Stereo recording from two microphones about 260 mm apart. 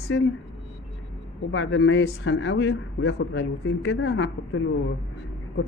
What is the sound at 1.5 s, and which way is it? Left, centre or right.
Speech, left.